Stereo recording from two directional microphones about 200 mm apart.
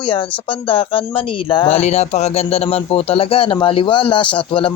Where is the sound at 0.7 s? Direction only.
25° left (ahead or behind).